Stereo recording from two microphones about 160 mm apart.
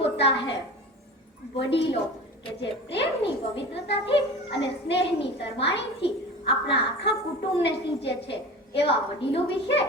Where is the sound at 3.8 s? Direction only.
90° left.